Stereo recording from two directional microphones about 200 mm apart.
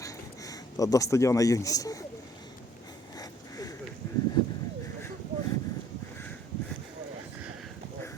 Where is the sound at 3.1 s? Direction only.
20° left (ahead or behind).